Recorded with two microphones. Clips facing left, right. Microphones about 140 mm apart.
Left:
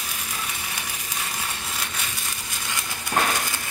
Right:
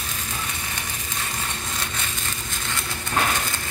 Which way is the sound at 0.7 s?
10° left (ahead or behind).